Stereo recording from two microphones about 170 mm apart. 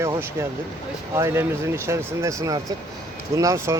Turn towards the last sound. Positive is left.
turn(degrees=-20)  # may be behind; listen again after turning